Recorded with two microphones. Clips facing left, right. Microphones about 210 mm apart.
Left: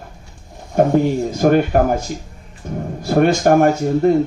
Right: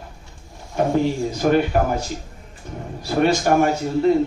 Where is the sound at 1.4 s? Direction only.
50° left (ahead or behind).